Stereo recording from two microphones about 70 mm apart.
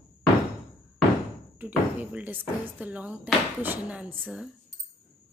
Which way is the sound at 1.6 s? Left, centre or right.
Right.